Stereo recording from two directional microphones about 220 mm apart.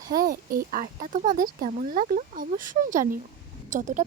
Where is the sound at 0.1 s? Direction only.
40° right (ahead or behind).